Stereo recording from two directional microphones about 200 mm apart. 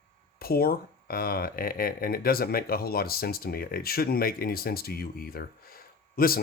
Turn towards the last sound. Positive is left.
turn(degrees=45)  # may be behind; listen again after turning